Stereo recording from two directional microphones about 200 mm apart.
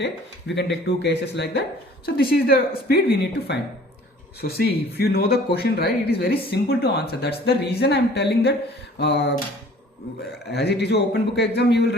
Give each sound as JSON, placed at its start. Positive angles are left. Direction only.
{"t": 0.5, "sound": "a man's voice", "side_deg": 65}
{"t": 10.5, "sound": "a man's voice", "side_deg": 55}